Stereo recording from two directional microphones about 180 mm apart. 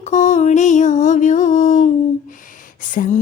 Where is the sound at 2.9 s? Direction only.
45° left (ahead or behind).